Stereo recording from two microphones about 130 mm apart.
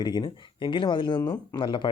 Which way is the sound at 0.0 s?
35° left (ahead or behind).